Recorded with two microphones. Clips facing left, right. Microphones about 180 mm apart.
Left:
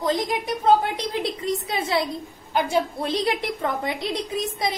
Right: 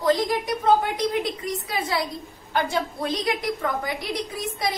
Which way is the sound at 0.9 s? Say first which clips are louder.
Right 2 dB; 30° left (ahead or behind).